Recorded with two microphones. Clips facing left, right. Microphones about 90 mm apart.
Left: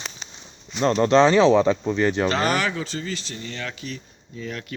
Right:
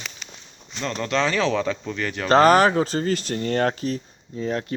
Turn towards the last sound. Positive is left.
turn(degrees=-35)  # may be behind; listen again after turning